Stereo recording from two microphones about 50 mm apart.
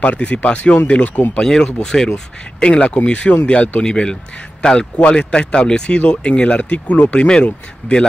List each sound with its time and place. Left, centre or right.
0.0 s speech: left
1.4 s speech: centre
3.8 s speech: centre